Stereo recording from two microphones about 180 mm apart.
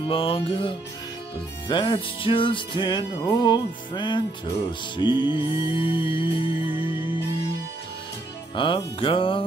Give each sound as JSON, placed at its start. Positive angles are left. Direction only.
{"t": 0.0, "sound": "music", "side_deg": 30}
{"t": 8.5, "sound": "music", "side_deg": 30}